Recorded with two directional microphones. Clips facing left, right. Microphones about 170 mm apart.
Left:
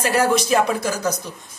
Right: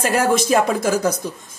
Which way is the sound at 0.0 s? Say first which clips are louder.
Right 1 dB; 50° right (ahead or behind).